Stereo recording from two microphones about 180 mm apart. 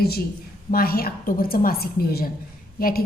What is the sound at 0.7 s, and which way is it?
A woman's voice, 55° left (ahead or behind).